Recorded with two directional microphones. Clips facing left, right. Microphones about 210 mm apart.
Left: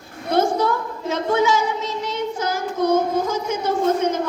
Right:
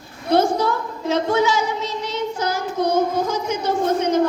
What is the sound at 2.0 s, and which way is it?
Child singing, 50° left (ahead or behind).